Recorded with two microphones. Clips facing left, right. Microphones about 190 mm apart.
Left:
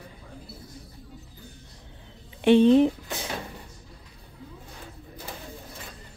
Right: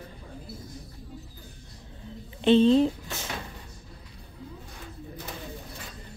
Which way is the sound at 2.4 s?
15° left (ahead or behind).